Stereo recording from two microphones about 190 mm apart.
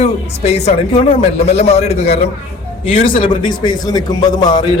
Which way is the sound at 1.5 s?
35° left (ahead or behind).